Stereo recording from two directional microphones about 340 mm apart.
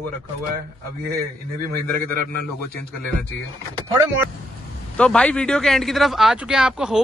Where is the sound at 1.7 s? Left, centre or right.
Right.